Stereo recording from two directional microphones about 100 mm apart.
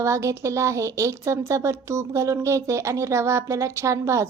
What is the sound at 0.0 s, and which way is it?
A woman's voice, 30° right (ahead or behind).